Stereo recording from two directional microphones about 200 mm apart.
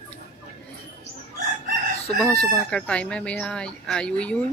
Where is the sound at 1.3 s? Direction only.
50° right (ahead or behind).